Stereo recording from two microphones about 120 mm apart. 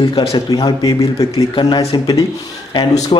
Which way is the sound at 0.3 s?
35° left (ahead or behind).